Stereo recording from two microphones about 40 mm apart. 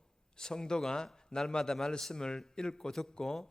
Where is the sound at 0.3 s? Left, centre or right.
Centre.